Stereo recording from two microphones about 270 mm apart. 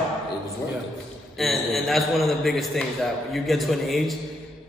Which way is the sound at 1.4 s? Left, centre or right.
Centre.